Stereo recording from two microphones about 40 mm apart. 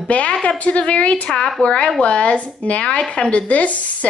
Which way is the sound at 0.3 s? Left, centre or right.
Left.